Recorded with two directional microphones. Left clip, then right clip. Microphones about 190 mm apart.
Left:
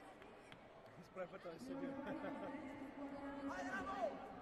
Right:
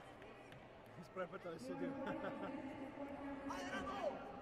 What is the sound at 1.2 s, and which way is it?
A man's voice, 40° right (ahead or behind).